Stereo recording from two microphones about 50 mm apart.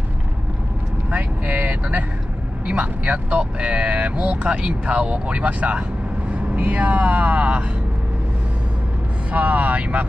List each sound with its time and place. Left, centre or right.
1.1 s vehicle: right
2.6 s speech: right
9.3 s speech: right